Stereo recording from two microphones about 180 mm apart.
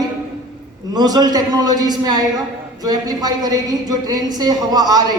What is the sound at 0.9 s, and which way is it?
A woman's voice, 20° right (ahead or behind).